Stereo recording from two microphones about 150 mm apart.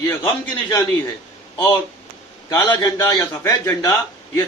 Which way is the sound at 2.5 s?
25° left (ahead or behind).